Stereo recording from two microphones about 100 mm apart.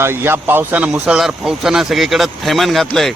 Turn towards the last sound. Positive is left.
turn(degrees=0)  # may be behind; listen again after turning